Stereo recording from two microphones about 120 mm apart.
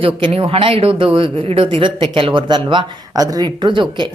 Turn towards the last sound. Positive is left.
turn(degrees=-40)  # may be behind; listen again after turning